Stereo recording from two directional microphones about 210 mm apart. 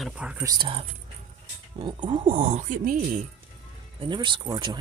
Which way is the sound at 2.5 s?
35° right (ahead or behind).